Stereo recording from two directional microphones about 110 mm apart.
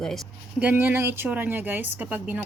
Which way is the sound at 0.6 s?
20° right (ahead or behind).